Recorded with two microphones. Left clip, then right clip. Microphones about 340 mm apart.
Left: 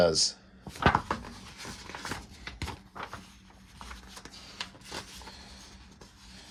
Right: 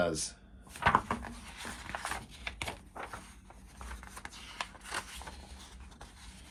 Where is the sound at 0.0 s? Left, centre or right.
Centre.